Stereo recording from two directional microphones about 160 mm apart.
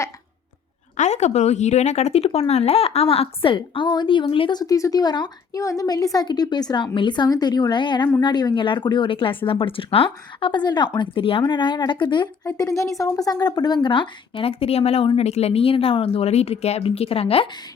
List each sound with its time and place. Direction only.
0.9 s speech: 45° left (ahead or behind)